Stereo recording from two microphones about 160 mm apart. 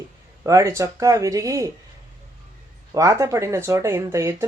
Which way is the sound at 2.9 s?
20° right (ahead or behind).